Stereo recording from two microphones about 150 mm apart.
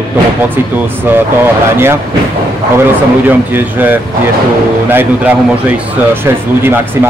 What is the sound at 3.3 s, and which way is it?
Speech, 10° right (ahead or behind).